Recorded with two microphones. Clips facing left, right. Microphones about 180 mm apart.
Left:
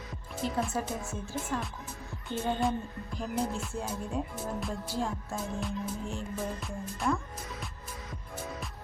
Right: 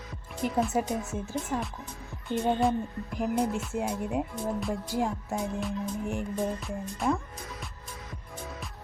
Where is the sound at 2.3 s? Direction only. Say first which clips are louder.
Right 4 dB; centre (ahead or behind).